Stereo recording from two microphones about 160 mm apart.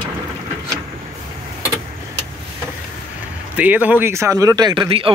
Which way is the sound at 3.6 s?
10° right (ahead or behind).